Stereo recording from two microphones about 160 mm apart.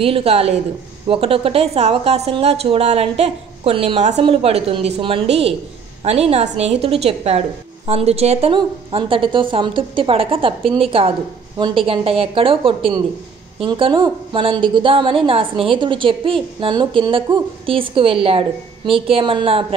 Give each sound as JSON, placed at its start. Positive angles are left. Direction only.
{"t": 0.0, "sound": "a woman's voice", "side_deg": -35}